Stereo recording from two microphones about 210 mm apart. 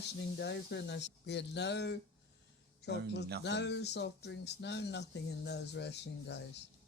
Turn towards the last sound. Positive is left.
turn(degrees=55)  # may be behind; listen again after turning